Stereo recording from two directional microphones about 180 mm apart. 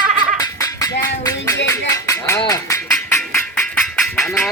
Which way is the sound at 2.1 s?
15° left (ahead or behind).